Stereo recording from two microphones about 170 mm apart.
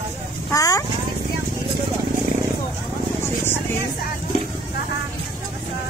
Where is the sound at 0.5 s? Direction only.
20° left (ahead or behind).